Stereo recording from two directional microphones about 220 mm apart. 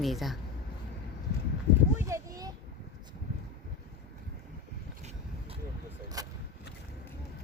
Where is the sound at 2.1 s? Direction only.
15° right (ahead or behind).